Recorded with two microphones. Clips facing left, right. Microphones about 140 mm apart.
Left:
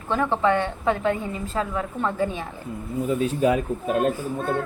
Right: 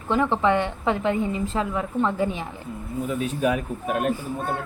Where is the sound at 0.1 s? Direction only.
20° right (ahead or behind).